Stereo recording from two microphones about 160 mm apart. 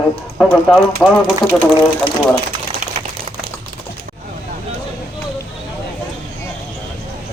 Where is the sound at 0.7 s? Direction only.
5° left (ahead or behind).